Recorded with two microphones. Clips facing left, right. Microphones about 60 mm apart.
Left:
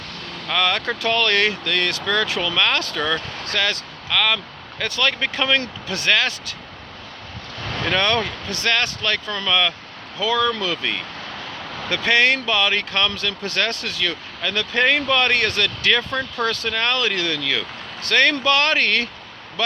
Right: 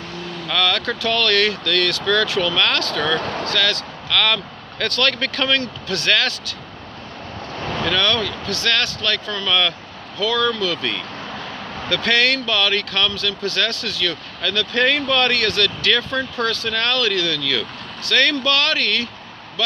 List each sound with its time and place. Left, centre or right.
0.5 s speech: left
3.2 s speech: right
3.5 s speech: left
4.1 s speech: centre
7.6 s vehicle: centre
7.9 s speech: left